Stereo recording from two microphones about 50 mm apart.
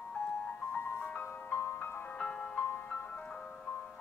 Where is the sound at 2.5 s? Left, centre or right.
Left.